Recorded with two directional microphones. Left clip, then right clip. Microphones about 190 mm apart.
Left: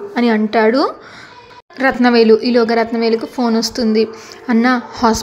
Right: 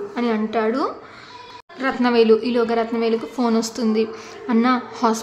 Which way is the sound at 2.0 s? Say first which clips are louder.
Left 4 dB; 25° left (ahead or behind).